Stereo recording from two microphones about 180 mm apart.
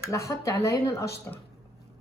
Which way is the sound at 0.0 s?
15° left (ahead or behind).